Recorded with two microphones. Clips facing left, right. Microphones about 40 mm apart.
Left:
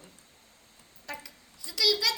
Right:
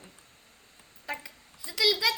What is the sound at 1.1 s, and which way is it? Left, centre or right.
A woman's voice, right.